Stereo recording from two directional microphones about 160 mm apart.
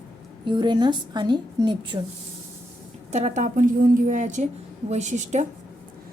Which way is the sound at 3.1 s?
45° right (ahead or behind).